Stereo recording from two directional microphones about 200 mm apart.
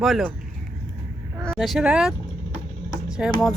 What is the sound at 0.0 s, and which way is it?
Speech, centre (ahead or behind).